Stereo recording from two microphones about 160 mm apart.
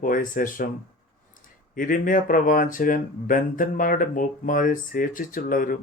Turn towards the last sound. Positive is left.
turn(degrees=55)  # may be behind; listen again after turning